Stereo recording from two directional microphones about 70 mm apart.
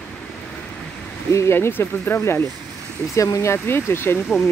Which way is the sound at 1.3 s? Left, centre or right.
Left.